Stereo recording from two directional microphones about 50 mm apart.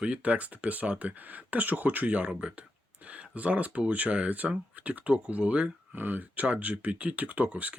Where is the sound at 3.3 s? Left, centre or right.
Right.